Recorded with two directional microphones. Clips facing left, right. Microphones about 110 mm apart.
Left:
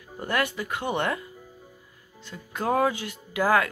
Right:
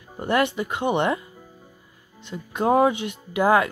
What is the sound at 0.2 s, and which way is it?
Speech, 25° right (ahead or behind).